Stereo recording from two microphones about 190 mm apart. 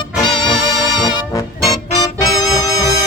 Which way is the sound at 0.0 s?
25° left (ahead or behind).